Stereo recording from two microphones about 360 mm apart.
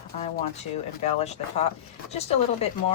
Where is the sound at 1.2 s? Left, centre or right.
Centre.